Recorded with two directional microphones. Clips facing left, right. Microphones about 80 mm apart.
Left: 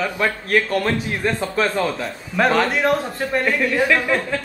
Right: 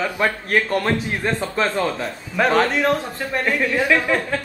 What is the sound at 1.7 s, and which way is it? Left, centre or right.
Speech, centre.